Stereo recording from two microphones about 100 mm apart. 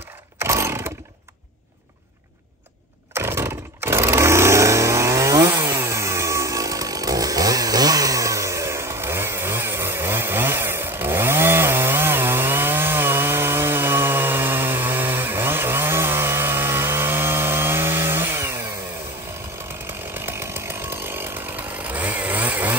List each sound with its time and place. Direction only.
0.4 s chainsaw: 25° right (ahead or behind)
3.2 s vehicle: 25° right (ahead or behind)
20.2 s chainsaw: 20° right (ahead or behind)